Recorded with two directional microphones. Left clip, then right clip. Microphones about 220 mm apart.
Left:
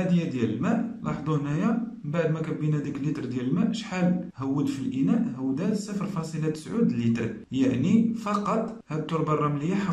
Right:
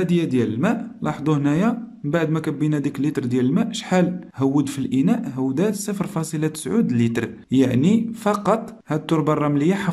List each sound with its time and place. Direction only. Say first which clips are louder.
0.1 s a man's voice: right 7 dB; 40° right (ahead or behind)